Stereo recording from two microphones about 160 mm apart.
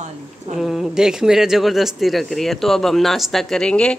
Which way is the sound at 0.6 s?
Centre (ahead or behind).